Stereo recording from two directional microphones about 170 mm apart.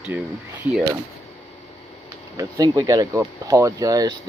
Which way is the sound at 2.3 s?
25° right (ahead or behind).